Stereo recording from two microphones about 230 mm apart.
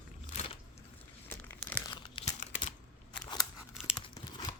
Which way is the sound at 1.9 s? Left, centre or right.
Centre.